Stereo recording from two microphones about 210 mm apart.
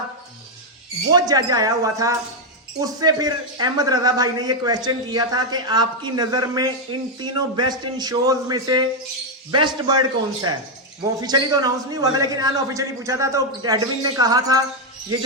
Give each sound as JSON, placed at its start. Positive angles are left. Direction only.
{"t": 1.1, "sound": "a man's voice", "side_deg": -20}